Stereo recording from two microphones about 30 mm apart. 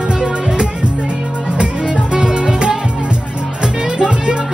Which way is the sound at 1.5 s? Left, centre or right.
Right.